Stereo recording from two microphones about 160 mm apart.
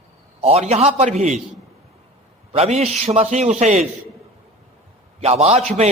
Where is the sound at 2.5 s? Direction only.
40° right (ahead or behind).